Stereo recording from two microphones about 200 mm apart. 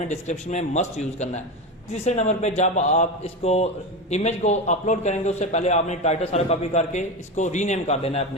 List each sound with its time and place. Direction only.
0.1 s a man's voice: 35° left (ahead or behind)